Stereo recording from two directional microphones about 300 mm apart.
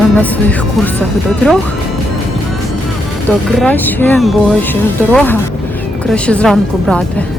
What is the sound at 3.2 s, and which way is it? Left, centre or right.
Speech, centre.